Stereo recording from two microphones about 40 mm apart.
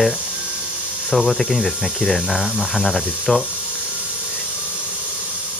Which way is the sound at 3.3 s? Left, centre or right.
Centre.